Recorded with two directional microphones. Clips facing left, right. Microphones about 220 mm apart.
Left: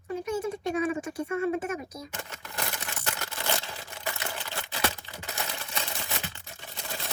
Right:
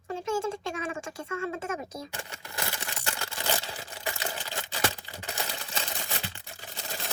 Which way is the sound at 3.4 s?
15° right (ahead or behind).